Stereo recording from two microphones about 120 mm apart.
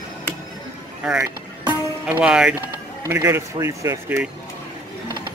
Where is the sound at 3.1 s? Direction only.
20° right (ahead or behind).